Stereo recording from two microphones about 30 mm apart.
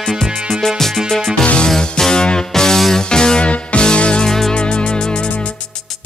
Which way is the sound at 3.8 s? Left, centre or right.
Left.